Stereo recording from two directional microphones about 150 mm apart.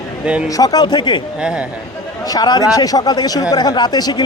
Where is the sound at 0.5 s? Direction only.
25° left (ahead or behind).